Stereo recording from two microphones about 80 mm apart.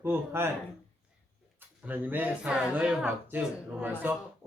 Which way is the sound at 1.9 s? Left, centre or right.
Right.